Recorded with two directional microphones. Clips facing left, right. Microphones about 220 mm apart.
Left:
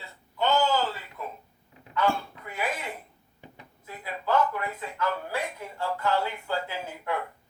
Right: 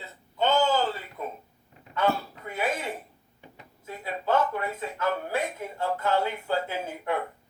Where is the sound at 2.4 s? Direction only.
25° right (ahead or behind).